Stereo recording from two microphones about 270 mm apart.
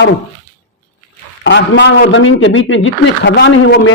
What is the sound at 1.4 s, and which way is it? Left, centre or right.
A man's voice, left.